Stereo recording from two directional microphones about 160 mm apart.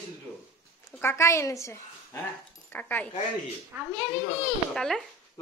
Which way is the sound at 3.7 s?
10° right (ahead or behind).